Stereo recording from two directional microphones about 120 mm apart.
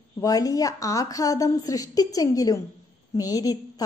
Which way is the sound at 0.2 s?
30° left (ahead or behind).